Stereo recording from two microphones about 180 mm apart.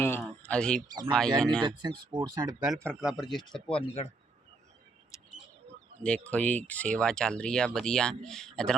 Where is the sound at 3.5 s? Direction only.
5° left (ahead or behind).